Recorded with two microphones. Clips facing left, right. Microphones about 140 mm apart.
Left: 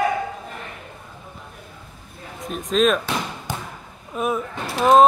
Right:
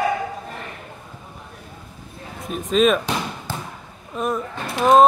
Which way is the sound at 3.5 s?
15° left (ahead or behind).